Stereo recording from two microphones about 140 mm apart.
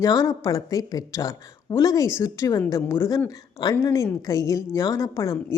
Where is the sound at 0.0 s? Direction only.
25° left (ahead or behind).